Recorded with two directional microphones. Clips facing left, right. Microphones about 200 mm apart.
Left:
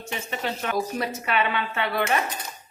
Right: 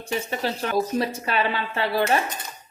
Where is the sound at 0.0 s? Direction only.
35° right (ahead or behind).